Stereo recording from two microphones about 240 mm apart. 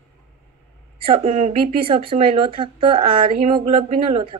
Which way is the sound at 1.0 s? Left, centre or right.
Right.